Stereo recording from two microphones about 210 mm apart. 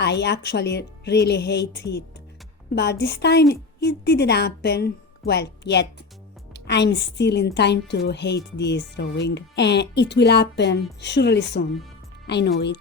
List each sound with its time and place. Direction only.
0.0 s a woman's voice: 55° left (ahead or behind)